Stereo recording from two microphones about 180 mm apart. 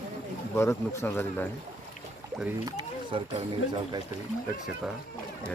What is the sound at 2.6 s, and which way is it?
Speech, 25° right (ahead or behind).